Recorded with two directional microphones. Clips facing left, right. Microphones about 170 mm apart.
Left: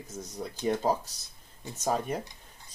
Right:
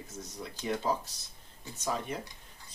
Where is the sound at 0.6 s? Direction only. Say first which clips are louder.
Left 4 dB; 45° left (ahead or behind).